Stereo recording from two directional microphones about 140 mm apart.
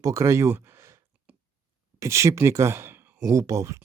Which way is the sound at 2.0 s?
20° right (ahead or behind).